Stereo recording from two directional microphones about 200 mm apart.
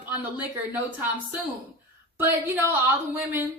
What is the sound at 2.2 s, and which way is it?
Speech, 10° right (ahead or behind).